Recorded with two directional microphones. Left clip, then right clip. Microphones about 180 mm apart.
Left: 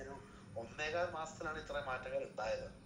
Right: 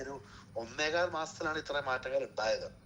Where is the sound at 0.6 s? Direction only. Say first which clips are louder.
Right 7 dB; 35° right (ahead or behind).